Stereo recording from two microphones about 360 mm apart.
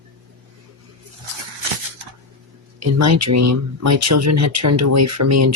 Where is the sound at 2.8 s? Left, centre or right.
Right.